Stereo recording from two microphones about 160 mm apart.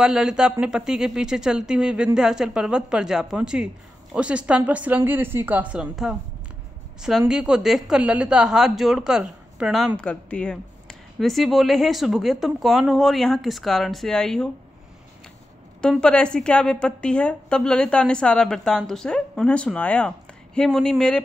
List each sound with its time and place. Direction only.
0.0 s a woman's voice: 5° right (ahead or behind)
15.8 s a woman's voice: 5° left (ahead or behind)